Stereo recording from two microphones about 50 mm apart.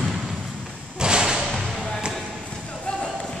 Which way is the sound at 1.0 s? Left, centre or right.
Centre.